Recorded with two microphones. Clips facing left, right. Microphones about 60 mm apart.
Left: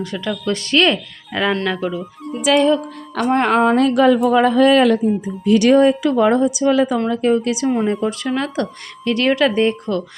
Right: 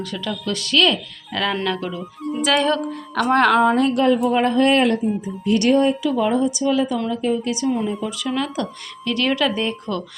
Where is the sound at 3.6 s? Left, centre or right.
Left.